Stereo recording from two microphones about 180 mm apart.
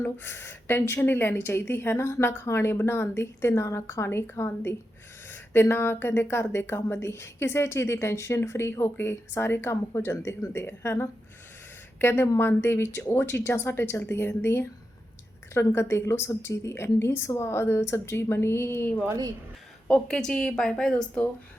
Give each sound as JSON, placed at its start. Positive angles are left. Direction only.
{"t": 0.0, "sound": "speech", "side_deg": 10}
{"t": 19.0, "sound": "speech", "side_deg": -20}
{"t": 19.9, "sound": "a woman's voice", "side_deg": 5}